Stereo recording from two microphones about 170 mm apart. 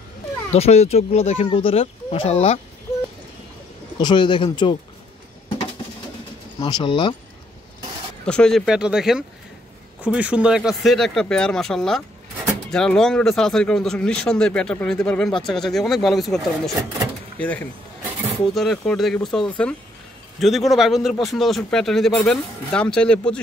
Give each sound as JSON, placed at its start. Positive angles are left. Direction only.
{"t": 0.5, "sound": "speech", "side_deg": 40}
{"t": 4.0, "sound": "speech", "side_deg": 25}
{"t": 6.6, "sound": "speech", "side_deg": 30}
{"t": 8.3, "sound": "speech", "side_deg": 5}